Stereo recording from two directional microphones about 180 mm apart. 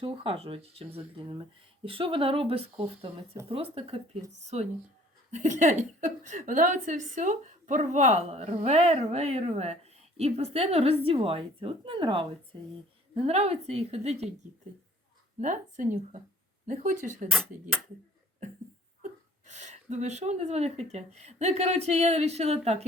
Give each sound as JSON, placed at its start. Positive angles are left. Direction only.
{"t": 0.0, "sound": "speech", "side_deg": -30}
{"t": 5.3, "sound": "speech", "side_deg": -40}
{"t": 15.4, "sound": "speech", "side_deg": -45}
{"t": 17.2, "sound": "speech", "side_deg": 0}
{"t": 19.5, "sound": "speech", "side_deg": -40}